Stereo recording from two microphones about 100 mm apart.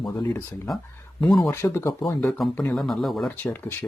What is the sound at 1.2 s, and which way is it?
Speech, centre (ahead or behind).